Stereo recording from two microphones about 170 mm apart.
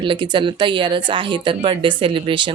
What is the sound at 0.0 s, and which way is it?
Speech, 30° right (ahead or behind).